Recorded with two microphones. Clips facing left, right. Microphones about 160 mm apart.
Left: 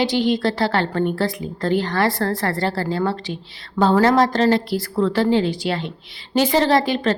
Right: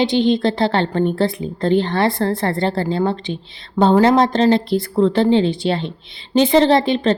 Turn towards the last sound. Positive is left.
turn(degrees=-25)  # may be behind; listen again after turning